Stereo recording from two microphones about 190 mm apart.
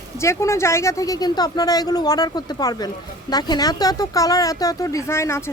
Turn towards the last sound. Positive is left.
turn(degrees=15)  # may be behind; listen again after turning